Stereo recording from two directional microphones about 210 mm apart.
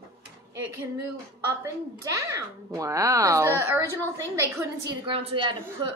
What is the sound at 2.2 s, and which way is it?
A child's voice, 15° right (ahead or behind).